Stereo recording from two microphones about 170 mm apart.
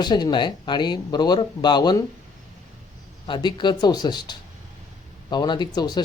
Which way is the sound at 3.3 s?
25° left (ahead or behind).